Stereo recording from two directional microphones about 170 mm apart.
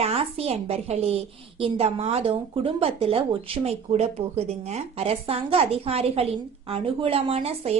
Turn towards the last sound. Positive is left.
turn(degrees=-35)  # may be behind; listen again after turning